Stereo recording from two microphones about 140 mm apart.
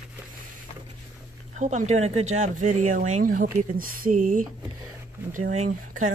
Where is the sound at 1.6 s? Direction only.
60° right (ahead or behind).